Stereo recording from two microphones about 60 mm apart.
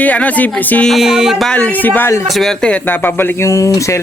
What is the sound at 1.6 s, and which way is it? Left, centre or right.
Speech, left.